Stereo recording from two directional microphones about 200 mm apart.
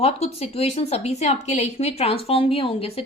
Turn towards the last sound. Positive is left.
turn(degrees=30)  # may be behind; listen again after turning